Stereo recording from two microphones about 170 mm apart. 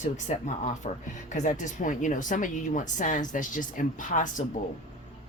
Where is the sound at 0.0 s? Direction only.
45° left (ahead or behind).